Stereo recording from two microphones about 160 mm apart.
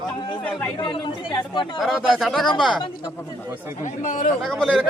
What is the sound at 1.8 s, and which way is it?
Speech, centre (ahead or behind).